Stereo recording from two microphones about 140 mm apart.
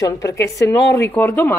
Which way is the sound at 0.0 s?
25° left (ahead or behind).